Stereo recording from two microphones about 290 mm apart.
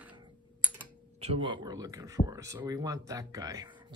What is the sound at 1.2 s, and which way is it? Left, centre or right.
Speech, centre.